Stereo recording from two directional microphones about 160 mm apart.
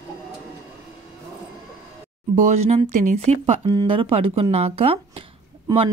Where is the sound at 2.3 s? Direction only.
45° right (ahead or behind).